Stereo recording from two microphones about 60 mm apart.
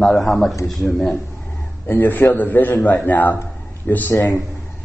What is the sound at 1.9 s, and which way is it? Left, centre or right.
A man's voice, left.